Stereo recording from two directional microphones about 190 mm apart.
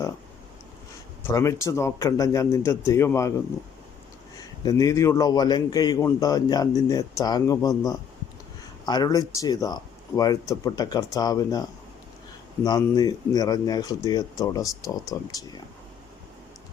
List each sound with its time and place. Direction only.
1.3 s a man's voice: 15° left (ahead or behind)
4.4 s a man's voice: 20° left (ahead or behind)
12.6 s a man's voice: 20° left (ahead or behind)